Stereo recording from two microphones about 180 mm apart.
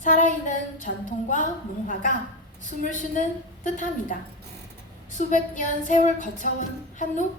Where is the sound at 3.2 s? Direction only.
45° left (ahead or behind).